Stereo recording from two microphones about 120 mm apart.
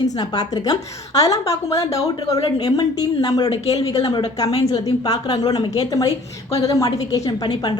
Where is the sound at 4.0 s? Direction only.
40° left (ahead or behind).